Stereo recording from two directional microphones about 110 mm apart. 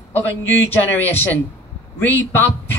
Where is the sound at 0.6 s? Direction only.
20° left (ahead or behind).